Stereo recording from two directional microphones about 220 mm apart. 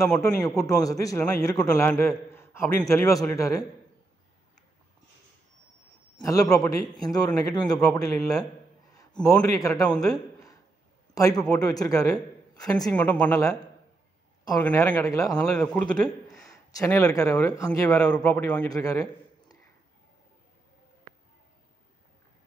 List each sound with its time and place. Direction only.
0.2 s a man's voice: 15° left (ahead or behind)
6.2 s a man's voice: 15° left (ahead or behind)
9.2 s a man's voice: 5° left (ahead or behind)
9.6 s a man's voice: 15° left (ahead or behind)
9.9 s a sound: 15° left (ahead or behind)
11.1 s a man's voice: 15° left (ahead or behind)
14.6 s a man's voice: 5° left (ahead or behind)
15.5 s a man's voice: 5° left (ahead or behind)
16.3 s a man's voice: 15° left (ahead or behind)